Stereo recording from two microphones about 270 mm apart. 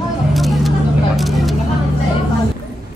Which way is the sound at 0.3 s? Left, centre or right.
Centre.